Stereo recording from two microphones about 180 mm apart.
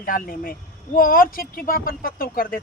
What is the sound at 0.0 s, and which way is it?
Speech, 55° left (ahead or behind).